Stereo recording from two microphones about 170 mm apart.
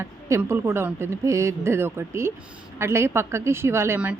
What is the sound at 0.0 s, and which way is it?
Speech, 15° right (ahead or behind).